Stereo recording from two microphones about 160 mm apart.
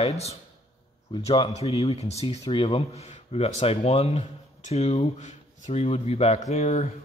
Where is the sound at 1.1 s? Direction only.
35° left (ahead or behind).